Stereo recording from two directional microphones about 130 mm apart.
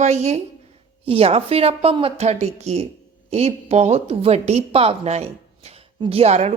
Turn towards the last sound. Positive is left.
turn(degrees=-55)  # may be behind; listen again after turning